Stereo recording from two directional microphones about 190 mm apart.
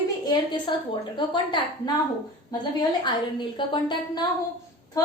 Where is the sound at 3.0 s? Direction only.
25° left (ahead or behind).